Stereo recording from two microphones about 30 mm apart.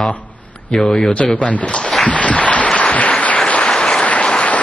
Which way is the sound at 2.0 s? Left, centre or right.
Left.